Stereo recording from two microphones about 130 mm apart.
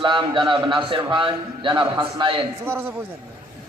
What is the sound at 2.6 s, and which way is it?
Speech, 15° right (ahead or behind).